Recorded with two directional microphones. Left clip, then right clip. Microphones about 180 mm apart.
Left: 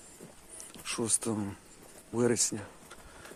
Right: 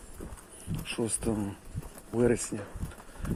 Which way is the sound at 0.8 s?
30° left (ahead or behind).